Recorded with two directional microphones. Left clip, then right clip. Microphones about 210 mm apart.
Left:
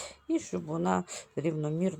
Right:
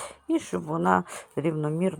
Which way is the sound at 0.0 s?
15° right (ahead or behind).